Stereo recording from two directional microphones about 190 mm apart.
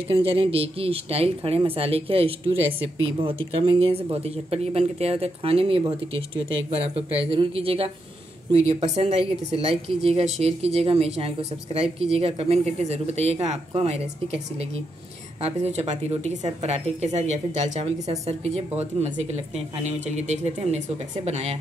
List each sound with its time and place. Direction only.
0.1 s speech: 30° right (ahead or behind)